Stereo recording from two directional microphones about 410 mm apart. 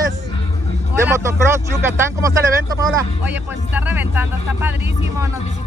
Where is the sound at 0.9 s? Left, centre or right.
Centre.